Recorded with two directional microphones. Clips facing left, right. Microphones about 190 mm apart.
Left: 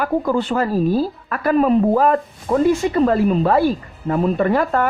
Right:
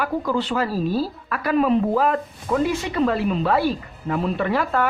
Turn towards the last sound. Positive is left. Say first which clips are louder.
# left 4 dB
turn(degrees=45)  # may be behind; listen again after turning